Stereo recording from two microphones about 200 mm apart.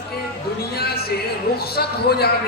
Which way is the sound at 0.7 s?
50° left (ahead or behind).